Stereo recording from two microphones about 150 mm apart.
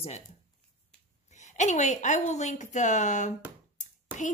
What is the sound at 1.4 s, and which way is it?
Speech, 50° left (ahead or behind).